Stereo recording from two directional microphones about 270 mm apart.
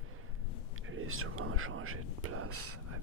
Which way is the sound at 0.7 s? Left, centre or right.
Right.